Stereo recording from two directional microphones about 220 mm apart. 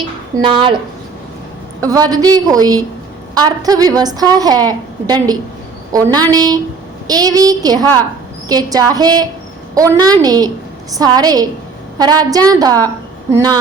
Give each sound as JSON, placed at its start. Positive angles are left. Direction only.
{"t": 0.3, "sound": "speech", "side_deg": -20}
{"t": 1.8, "sound": "a woman's voice", "side_deg": -15}